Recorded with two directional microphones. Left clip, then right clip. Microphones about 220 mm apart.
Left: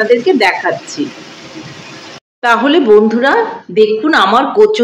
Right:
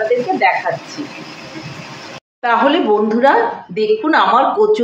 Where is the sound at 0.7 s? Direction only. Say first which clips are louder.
Left 4 dB; 40° left (ahead or behind).